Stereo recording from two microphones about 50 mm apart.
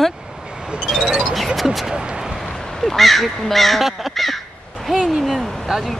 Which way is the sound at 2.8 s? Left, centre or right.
Centre.